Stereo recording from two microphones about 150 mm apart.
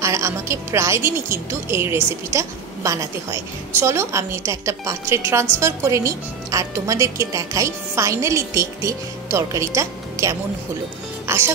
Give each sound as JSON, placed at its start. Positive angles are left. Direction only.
{"t": 0.0, "sound": "a woman's voice", "side_deg": -20}
{"t": 11.2, "sound": "music", "side_deg": -15}